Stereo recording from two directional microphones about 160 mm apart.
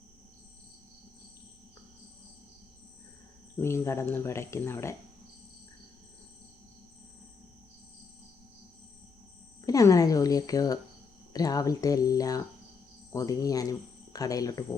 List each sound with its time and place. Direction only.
3.6 s speech: 15° left (ahead or behind)
9.6 s a sound: 20° left (ahead or behind)
11.3 s speech: 20° left (ahead or behind)